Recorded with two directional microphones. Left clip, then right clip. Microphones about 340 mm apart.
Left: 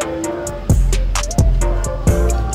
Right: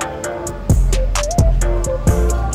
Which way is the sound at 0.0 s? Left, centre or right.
Centre.